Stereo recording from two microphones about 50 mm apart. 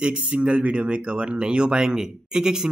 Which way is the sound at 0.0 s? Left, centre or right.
Right.